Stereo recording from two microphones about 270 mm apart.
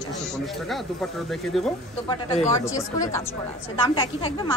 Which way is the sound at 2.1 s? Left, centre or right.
Centre.